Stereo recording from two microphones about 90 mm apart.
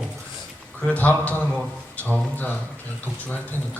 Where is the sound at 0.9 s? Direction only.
20° left (ahead or behind).